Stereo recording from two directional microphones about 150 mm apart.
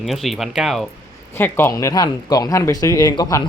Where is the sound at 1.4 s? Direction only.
15° left (ahead or behind).